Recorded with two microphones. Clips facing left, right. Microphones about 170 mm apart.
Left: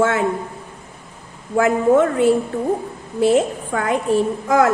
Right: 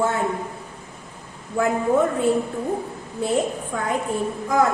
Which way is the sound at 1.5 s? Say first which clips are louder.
Left 5 dB; 85° left.